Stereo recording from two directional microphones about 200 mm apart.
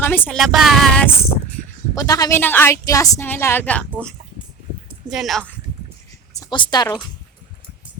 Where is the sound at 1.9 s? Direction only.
15° left (ahead or behind); by 5.5 s centre (ahead or behind).